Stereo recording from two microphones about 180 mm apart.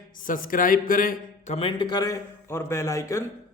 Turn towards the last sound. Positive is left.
turn(degrees=15)  # may be behind; listen again after turning